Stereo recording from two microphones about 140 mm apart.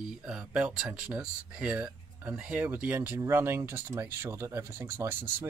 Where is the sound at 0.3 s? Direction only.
10° right (ahead or behind).